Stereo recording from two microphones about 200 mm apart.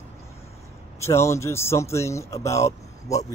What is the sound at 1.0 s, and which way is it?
Speech, 15° left (ahead or behind).